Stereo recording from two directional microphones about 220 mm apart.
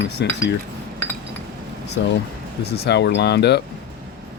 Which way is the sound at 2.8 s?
50° left (ahead or behind).